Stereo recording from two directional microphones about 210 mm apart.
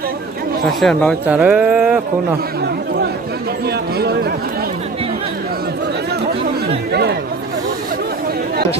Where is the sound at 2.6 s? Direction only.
50° right (ahead or behind).